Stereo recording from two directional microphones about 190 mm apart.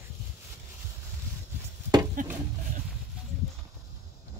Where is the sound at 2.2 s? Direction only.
45° right (ahead or behind).